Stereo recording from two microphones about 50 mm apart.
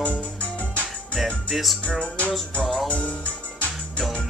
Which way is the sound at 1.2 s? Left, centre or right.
Centre.